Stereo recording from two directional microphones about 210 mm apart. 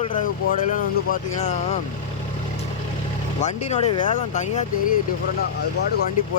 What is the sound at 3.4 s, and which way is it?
Speech, 35° left (ahead or behind).